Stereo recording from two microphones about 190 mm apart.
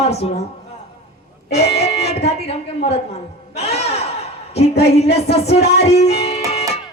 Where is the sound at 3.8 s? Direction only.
35° left (ahead or behind).